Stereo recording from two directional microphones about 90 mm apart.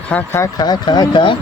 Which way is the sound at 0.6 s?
50° left (ahead or behind).